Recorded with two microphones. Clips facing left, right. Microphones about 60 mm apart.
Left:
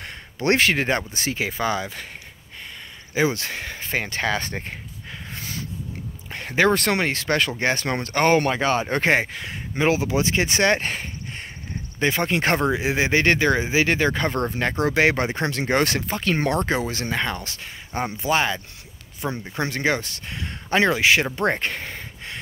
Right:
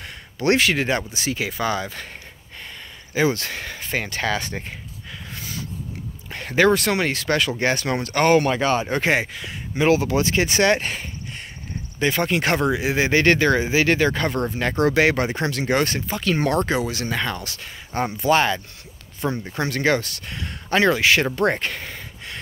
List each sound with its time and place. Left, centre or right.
0.0 s speech: left
1.4 s speech: left
3.2 s speech: left
6.3 s a sound: left
6.7 s speech: left
9.8 s speech: left
14.3 s speech: left
14.7 s speech: centre
18.2 s speech: centre; by 22.4 s left